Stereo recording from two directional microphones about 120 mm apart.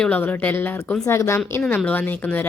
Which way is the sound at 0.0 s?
10° left (ahead or behind).